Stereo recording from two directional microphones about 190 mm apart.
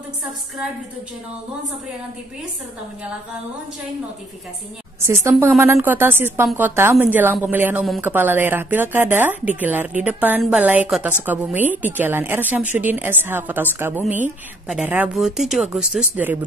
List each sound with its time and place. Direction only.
5.0 s a woman's voice: 10° right (ahead or behind)